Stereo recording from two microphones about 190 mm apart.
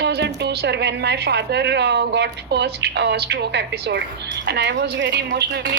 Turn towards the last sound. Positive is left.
turn(degrees=-65)  # may be behind; listen again after turning